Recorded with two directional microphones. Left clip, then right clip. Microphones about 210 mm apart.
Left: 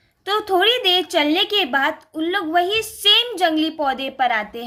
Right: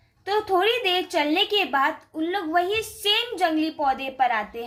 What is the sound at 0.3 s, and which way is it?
A woman's voice, 30° left (ahead or behind).